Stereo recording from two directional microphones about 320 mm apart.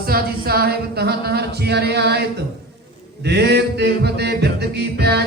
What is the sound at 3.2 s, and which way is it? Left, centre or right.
Music, right.